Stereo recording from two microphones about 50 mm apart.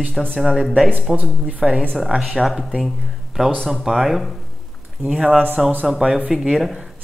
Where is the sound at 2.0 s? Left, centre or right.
Centre.